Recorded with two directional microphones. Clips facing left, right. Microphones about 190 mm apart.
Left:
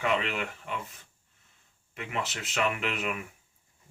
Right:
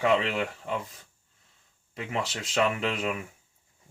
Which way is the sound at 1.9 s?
30° right (ahead or behind).